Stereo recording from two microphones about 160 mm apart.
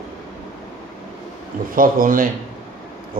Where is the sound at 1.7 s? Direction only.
60° right (ahead or behind).